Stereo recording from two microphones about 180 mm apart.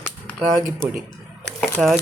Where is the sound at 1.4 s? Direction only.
Centre (ahead or behind).